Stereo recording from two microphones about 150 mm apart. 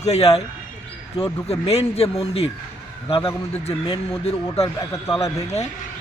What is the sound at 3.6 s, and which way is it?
Speech, 40° left (ahead or behind).